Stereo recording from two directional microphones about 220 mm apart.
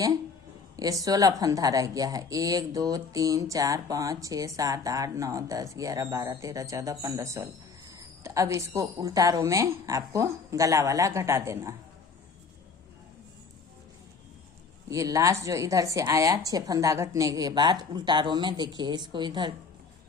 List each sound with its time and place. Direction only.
0.8 s a woman's voice: 15° right (ahead or behind)
14.8 s a woman's voice: 15° right (ahead or behind)